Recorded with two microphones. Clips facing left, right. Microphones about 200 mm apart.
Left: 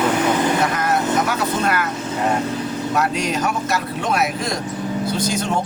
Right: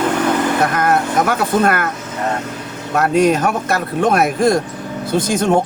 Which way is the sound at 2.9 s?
55° right (ahead or behind).